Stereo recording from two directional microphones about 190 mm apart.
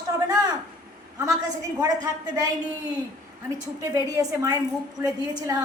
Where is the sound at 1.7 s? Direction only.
20° right (ahead or behind).